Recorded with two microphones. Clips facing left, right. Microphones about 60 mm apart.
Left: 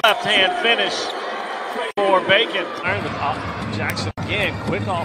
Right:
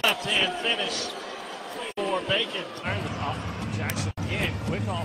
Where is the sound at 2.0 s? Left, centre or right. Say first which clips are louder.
Left 11 dB; left.